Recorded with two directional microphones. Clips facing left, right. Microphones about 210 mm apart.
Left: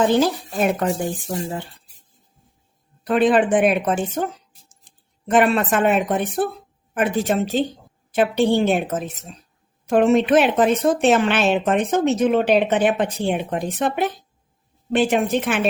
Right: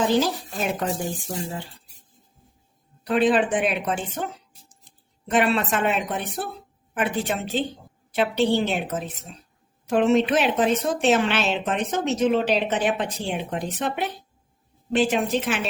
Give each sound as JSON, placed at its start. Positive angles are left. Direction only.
{"t": 0.1, "sound": "speech", "side_deg": 55}
{"t": 3.0, "sound": "speech", "side_deg": 50}
{"t": 5.3, "sound": "speech", "side_deg": 50}